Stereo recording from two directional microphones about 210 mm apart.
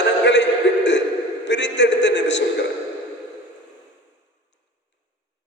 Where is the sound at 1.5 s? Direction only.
55° left (ahead or behind).